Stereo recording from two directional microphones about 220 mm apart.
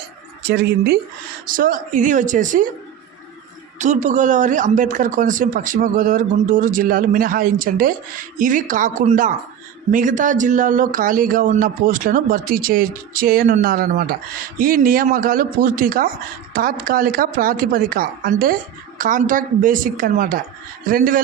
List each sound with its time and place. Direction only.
0.4 s speech: 50° right (ahead or behind)
3.8 s speech: 35° right (ahead or behind)